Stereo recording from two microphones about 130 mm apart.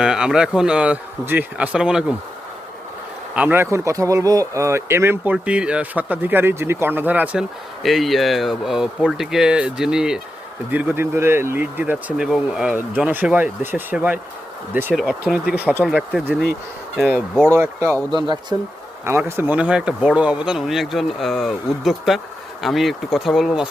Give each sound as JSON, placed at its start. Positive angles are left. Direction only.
{"t": 0.0, "sound": "speech", "side_deg": -5}
{"t": 3.3, "sound": "speech", "side_deg": -15}
{"t": 7.8, "sound": "speech", "side_deg": 0}
{"t": 12.1, "sound": "speech", "side_deg": -5}
{"t": 15.9, "sound": "speech", "side_deg": 0}
{"t": 17.5, "sound": "speech", "side_deg": -20}
{"t": 18.1, "sound": "speech", "side_deg": -35}
{"t": 19.0, "sound": "speech", "side_deg": -15}